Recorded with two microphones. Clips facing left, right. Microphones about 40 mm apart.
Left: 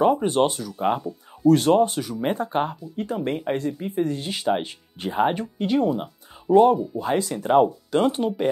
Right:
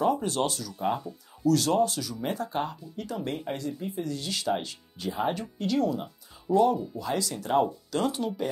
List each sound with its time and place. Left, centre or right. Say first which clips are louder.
0.0 s speech: left 7 dB; left